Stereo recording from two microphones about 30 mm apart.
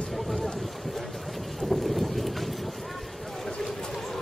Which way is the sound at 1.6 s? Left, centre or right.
Centre.